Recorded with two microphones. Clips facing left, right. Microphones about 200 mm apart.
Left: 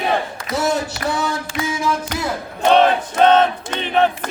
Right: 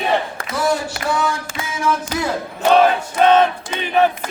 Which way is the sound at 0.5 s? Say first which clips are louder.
Even; 20° left (ahead or behind).